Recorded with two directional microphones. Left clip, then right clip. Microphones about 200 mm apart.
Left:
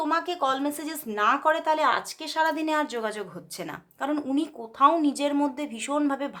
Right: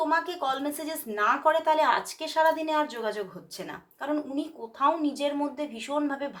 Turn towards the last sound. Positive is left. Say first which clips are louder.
# left 3 dB
turn(degrees=40)  # may be behind; listen again after turning